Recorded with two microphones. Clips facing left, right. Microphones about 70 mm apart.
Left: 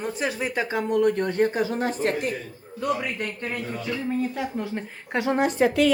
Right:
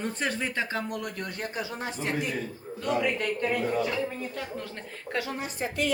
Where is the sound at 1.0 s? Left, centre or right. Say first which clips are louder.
Left 14 dB; left.